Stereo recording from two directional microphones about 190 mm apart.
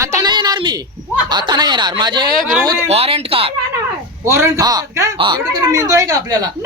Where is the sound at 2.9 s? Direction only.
30° right (ahead or behind).